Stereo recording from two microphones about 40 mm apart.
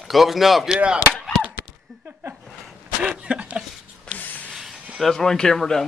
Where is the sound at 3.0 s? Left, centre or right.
Right.